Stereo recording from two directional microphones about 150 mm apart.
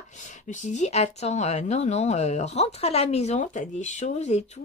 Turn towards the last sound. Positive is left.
turn(degrees=50)  # may be behind; listen again after turning